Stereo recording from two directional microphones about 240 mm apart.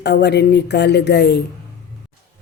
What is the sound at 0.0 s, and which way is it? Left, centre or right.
A woman's voice, left.